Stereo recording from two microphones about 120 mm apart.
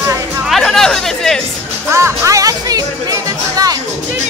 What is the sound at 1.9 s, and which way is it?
Speech, 20° right (ahead or behind).